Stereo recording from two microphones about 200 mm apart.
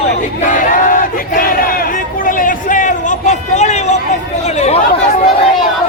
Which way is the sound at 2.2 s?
40° left (ahead or behind).